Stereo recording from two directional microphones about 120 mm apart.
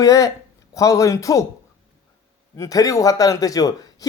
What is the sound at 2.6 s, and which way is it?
Speech, 30° left (ahead or behind).